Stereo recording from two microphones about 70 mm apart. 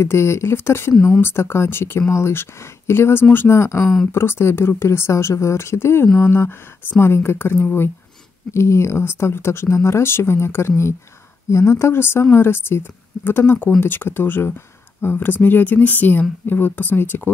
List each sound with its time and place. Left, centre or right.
0.0 s speech: left